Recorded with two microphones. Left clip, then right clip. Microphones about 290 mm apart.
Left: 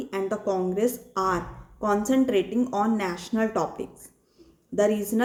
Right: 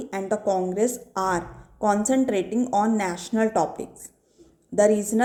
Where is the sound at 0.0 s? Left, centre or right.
Centre.